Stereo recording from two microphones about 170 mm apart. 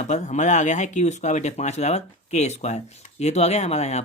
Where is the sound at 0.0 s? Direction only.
45° left (ahead or behind).